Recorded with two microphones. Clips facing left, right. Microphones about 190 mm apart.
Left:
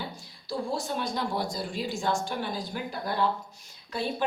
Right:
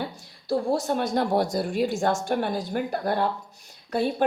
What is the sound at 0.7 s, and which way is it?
A woman's voice, 60° right (ahead or behind).